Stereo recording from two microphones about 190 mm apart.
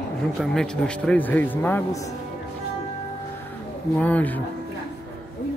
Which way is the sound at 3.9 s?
10° left (ahead or behind).